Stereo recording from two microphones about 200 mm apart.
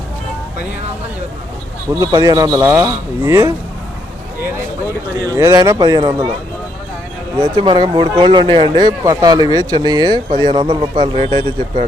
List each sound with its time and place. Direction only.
1.9 s speech: 20° right (ahead or behind)
5.3 s speech: 15° right (ahead or behind)
7.3 s speech: 25° right (ahead or behind)